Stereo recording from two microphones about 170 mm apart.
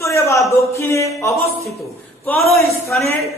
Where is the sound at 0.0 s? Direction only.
15° left (ahead or behind).